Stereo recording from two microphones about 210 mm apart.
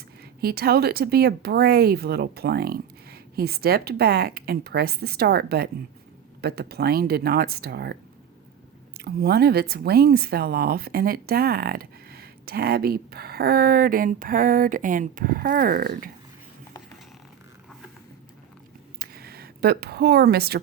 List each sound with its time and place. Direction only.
0.4 s speech: 45° right (ahead or behind)
9.0 s speech: 45° right (ahead or behind)
18.9 s a sound: 45° right (ahead or behind)